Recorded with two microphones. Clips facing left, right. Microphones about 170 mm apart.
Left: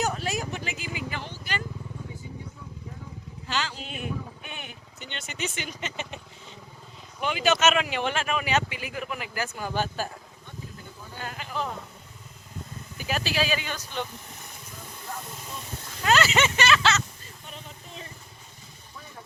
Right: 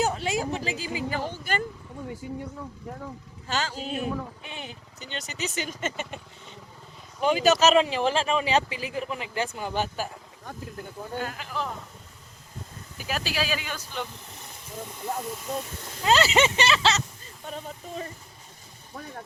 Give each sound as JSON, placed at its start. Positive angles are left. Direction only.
{"t": 0.0, "sound": "a sound", "side_deg": -25}
{"t": 3.5, "sound": "a man's voice", "side_deg": -45}
{"t": 7.2, "sound": "speech", "side_deg": -40}
{"t": 11.2, "sound": "speech", "side_deg": 0}
{"t": 13.0, "sound": "speech", "side_deg": 0}
{"t": 16.0, "sound": "speech", "side_deg": -30}
{"t": 17.5, "sound": "a sound", "side_deg": -45}